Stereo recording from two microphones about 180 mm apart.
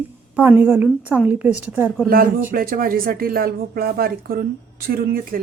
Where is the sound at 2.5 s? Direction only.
55° right (ahead or behind).